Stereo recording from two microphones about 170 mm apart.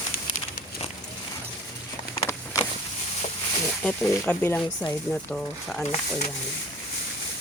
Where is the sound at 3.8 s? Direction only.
10° left (ahead or behind).